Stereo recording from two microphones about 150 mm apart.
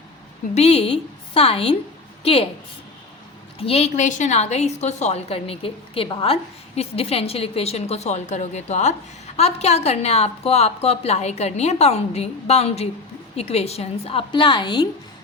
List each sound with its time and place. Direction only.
0.5 s a woman's voice: 45° left (ahead or behind)
3.6 s a woman's voice: 40° left (ahead or behind)